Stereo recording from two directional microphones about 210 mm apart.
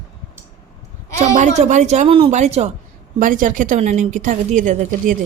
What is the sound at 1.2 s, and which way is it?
A woman's voice, 35° right (ahead or behind).